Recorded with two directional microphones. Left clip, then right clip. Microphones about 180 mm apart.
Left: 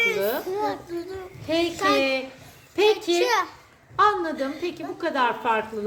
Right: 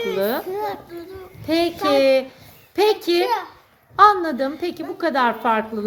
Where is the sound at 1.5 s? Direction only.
55° right (ahead or behind).